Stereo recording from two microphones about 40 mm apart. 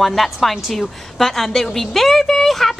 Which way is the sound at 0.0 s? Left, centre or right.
Centre.